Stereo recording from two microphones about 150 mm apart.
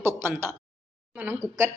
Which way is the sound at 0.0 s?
15° right (ahead or behind).